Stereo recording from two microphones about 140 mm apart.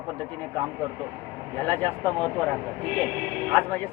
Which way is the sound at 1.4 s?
10° left (ahead or behind).